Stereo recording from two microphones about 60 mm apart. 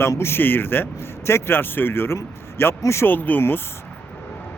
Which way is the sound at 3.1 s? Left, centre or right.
Left.